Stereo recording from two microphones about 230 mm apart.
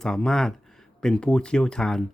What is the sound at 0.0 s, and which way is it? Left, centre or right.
Speech, centre.